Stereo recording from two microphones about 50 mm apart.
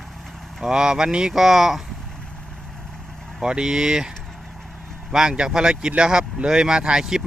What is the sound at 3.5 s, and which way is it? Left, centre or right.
Speech, centre.